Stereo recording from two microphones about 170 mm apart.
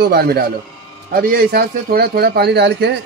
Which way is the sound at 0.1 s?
65° right (ahead or behind).